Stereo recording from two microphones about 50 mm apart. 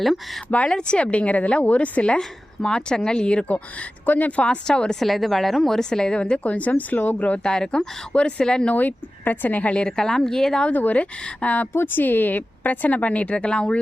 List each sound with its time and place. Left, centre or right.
0.5 s speech: left
4.0 s speech: left
4.6 s speech: centre
5.0 s speech: centre; by 7.3 s left
7.4 s speech: centre
8.7 s speech: left
9.8 s speech: centre
10.7 s speech: left
11.7 s speech: left; by 13.7 s centre